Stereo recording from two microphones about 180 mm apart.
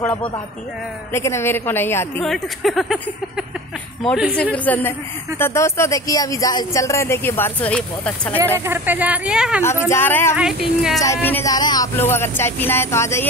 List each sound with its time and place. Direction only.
0.0 s speech: 10° left (ahead or behind)
2.2 s speech: centre (ahead or behind)
4.4 s speech: 10° left (ahead or behind)
8.5 s a woman's voice: 10° right (ahead or behind)
9.6 s speech: 15° left (ahead or behind)
10.3 s speech: 5° right (ahead or behind)
11.0 s speech: 15° left (ahead or behind)